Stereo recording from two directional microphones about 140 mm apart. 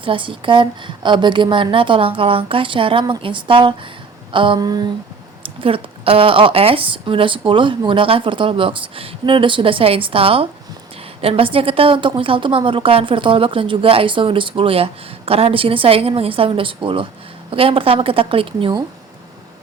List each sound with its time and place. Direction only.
0.0 s speech: 40° right (ahead or behind)